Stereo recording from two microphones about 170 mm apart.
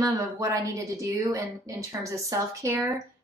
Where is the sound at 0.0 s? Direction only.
20° right (ahead or behind).